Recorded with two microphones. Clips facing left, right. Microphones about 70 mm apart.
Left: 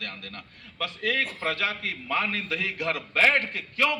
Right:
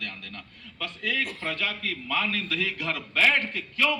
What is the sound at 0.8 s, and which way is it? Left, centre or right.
A man's voice, left.